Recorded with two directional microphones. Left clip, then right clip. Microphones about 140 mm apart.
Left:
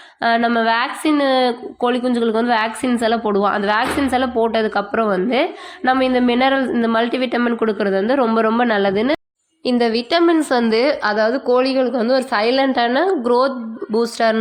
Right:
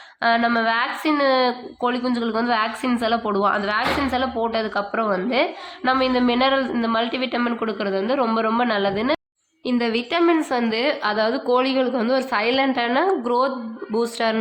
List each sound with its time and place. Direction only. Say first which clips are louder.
0.2 s a woman's voice: left 3 dB; 35° left (ahead or behind)
10.5 s a woman's voice: left 6 dB; 50° left (ahead or behind)